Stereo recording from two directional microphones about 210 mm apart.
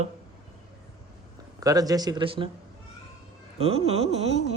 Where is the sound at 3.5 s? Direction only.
30° right (ahead or behind).